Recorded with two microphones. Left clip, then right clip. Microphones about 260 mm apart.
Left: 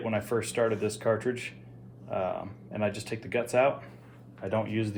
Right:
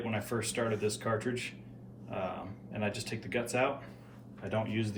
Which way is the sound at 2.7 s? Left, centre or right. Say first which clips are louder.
Left 5 dB; left.